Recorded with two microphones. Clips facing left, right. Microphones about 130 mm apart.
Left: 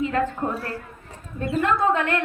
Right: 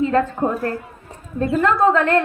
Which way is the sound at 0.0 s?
40° right (ahead or behind).